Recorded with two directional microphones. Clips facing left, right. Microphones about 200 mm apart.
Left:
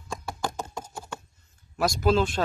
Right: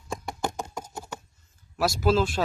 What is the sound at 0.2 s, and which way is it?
Knock, 15° right (ahead or behind).